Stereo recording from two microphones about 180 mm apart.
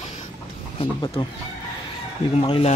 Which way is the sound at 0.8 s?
30° left (ahead or behind).